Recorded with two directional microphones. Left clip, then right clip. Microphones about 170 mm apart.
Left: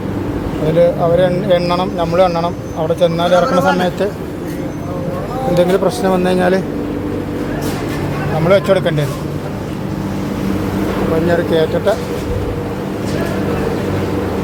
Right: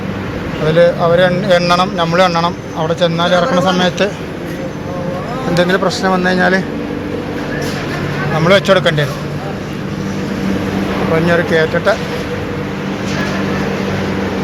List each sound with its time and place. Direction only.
0.8 s speech: 5° left (ahead or behind)
5.5 s speech: 15° left (ahead or behind)
8.4 s speech: 10° left (ahead or behind)
11.3 s speech: 10° left (ahead or behind)